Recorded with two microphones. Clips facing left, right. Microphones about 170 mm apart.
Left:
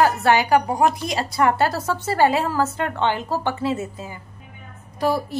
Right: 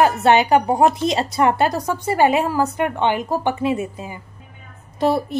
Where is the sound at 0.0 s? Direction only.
20° right (ahead or behind).